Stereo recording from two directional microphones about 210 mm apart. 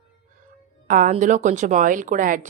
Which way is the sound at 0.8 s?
40° right (ahead or behind).